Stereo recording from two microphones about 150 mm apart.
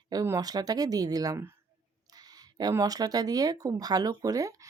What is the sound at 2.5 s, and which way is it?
Speech, 25° right (ahead or behind).